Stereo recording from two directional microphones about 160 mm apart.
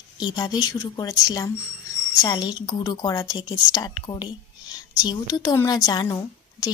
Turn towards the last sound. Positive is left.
turn(degrees=25)  # may be behind; listen again after turning